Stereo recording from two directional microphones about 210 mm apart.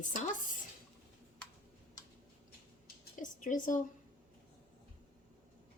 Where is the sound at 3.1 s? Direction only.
40° left (ahead or behind).